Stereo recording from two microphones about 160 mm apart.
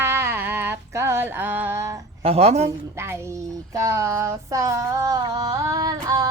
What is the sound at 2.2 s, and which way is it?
Mantra, 40° right (ahead or behind).